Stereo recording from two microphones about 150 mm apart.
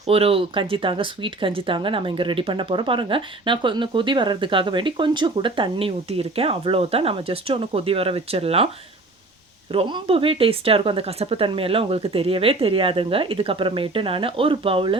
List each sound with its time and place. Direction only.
0.1 s speech: 40° right (ahead or behind)
9.7 s speech: 35° right (ahead or behind)